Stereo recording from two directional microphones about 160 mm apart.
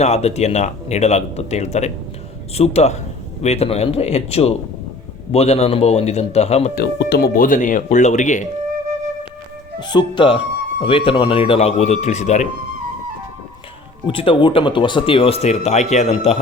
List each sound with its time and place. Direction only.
0.0 s speech: 40° left (ahead or behind)
6.7 s speech: 75° left (ahead or behind); by 8.4 s 50° left (ahead or behind)
9.8 s speech: 30° left (ahead or behind); by 12.5 s 45° left (ahead or behind)
14.1 s speech: 35° left (ahead or behind)